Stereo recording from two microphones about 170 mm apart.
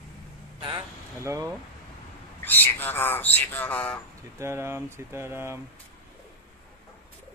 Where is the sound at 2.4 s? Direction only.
10° left (ahead or behind).